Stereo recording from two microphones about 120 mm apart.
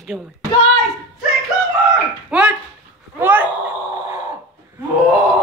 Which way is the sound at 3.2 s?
15° right (ahead or behind).